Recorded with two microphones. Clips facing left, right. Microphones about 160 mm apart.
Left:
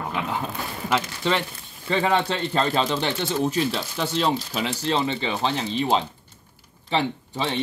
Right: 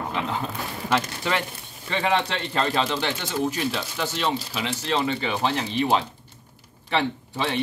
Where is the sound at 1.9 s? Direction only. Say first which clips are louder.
Left 2 dB; 35° left (ahead or behind).